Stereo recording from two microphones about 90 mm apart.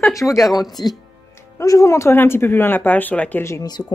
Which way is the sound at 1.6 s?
35° left (ahead or behind).